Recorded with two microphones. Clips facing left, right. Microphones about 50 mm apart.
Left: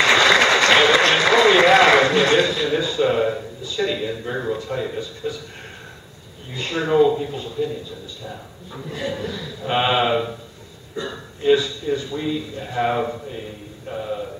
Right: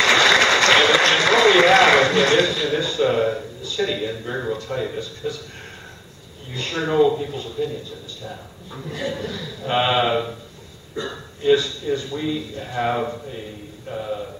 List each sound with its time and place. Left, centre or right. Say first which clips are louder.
0.0 s applause: left 1 dB; centre
6.5 s a man's voice: left 2 dB; centre